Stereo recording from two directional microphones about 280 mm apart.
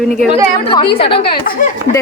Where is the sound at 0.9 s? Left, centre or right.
Centre.